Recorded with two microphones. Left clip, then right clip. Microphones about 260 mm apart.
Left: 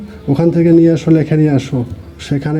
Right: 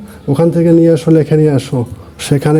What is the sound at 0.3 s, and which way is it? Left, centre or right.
A man's voice, right.